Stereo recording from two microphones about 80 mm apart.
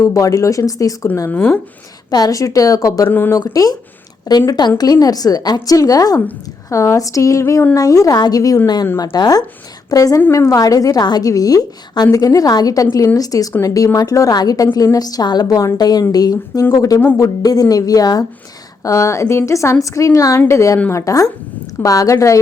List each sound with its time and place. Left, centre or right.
0.0 s a woman's voice: left
1.3 s speech: centre
2.0 s a woman's voice: left
3.1 s speech: left
3.3 s a woman's voice: left
18.8 s a woman's voice: left